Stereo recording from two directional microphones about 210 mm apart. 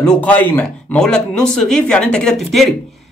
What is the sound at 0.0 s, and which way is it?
Speech, 5° left (ahead or behind).